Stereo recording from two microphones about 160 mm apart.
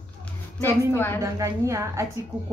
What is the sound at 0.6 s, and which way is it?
Speech, 15° left (ahead or behind).